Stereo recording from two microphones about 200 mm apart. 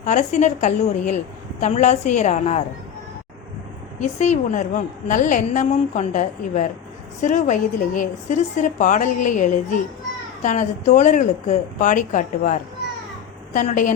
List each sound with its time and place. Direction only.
0.0 s a woman's voice: 35° left (ahead or behind)
4.0 s a woman's voice: 35° left (ahead or behind)